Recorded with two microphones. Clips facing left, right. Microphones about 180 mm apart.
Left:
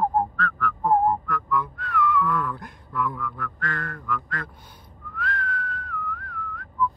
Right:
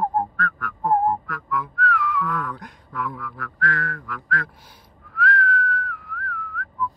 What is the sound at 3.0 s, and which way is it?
Quack, centre (ahead or behind).